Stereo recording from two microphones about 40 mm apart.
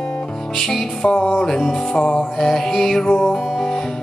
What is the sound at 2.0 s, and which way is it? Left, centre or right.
Music, left.